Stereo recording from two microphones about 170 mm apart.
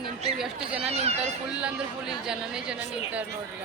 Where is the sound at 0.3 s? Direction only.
Centre (ahead or behind).